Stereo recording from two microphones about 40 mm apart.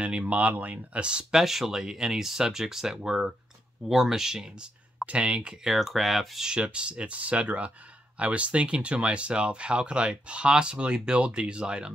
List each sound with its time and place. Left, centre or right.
0.0 s speech: right
1.3 s speech: centre
5.0 s speech: right
5.8 s speech: centre
6.5 s speech: right